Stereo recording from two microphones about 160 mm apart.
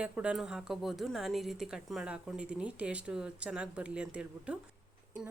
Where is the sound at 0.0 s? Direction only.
5° right (ahead or behind).